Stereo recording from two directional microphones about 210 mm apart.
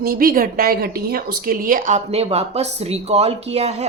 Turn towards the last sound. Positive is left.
turn(degrees=-30)  # may be behind; listen again after turning